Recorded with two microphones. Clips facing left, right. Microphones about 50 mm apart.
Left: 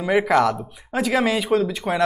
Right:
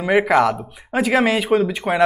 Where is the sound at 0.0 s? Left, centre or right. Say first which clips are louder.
Right 2 dB; right.